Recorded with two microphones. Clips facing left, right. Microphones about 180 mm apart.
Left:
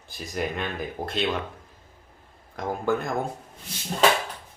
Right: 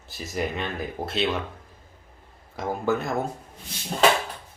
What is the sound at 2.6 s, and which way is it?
Speech, 5° right (ahead or behind).